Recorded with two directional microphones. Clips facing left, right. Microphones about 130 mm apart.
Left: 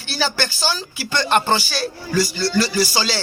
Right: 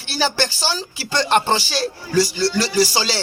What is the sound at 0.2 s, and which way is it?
Music, 30° right (ahead or behind).